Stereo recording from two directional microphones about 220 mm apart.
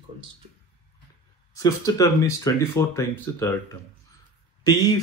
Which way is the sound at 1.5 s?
15° left (ahead or behind).